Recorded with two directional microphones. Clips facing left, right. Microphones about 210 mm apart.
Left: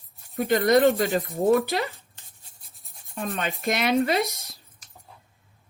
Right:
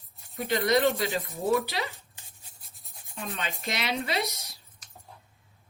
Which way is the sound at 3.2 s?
50° left (ahead or behind).